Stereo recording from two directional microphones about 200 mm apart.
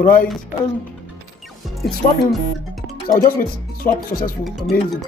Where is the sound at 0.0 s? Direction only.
45° left (ahead or behind).